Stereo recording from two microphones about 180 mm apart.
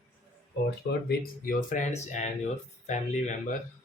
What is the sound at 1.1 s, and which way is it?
Speech, 50° left (ahead or behind).